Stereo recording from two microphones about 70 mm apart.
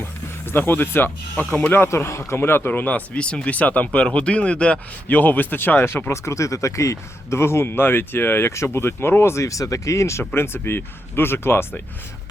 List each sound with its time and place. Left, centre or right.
0.0 s speech: left
1.7 s speech: left